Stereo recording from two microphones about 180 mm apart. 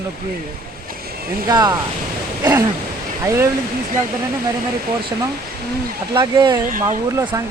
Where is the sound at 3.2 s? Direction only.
15° right (ahead or behind).